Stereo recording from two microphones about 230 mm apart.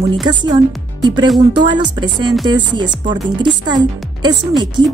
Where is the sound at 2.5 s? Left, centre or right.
Centre.